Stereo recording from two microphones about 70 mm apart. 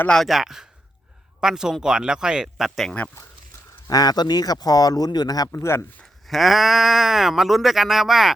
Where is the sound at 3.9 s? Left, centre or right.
Left.